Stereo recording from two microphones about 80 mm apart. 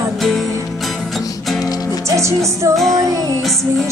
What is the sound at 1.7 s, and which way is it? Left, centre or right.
Music, left.